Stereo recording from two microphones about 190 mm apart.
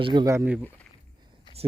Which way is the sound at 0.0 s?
25° right (ahead or behind).